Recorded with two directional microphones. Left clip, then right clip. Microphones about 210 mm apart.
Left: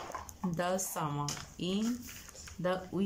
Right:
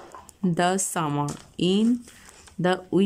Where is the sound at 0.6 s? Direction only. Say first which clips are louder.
Right 10 dB; 50° right (ahead or behind).